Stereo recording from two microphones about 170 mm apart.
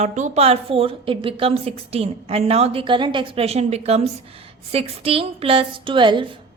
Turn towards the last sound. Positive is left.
turn(degrees=-30)  # may be behind; listen again after turning